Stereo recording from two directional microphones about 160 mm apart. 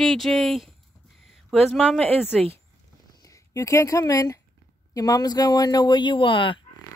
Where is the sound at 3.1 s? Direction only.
20° left (ahead or behind).